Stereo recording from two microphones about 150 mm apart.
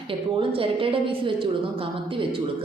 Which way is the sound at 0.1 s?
35° right (ahead or behind).